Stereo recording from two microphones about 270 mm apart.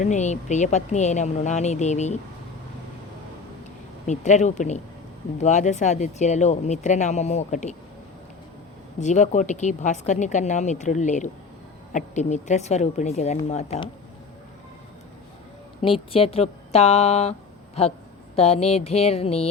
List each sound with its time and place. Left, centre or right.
0.0 s speech: left
4.0 s speech: left
9.0 s speech: left
15.8 s speech: centre
18.3 s speech: left